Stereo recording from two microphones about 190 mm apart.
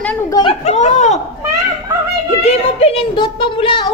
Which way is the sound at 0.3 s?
25° left (ahead or behind).